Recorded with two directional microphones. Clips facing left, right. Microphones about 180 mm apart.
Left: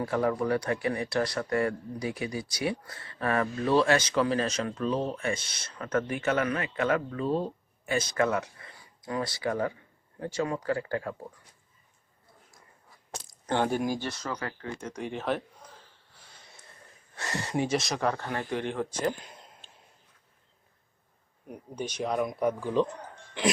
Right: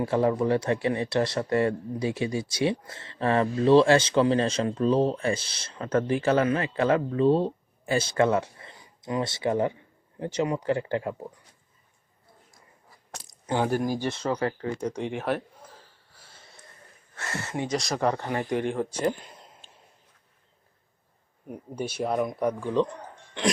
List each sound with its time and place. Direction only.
0.0 s speech: 25° right (ahead or behind)
13.5 s speech: 5° right (ahead or behind)
14.0 s speech: 25° right (ahead or behind)
15.1 s speech: 10° right (ahead or behind)
17.2 s speech: 15° left (ahead or behind)
17.8 s speech: 10° right (ahead or behind)
21.4 s speech: 5° right (ahead or behind)